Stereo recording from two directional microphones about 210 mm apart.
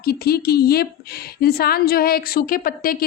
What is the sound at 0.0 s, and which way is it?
Speech, 45° left (ahead or behind).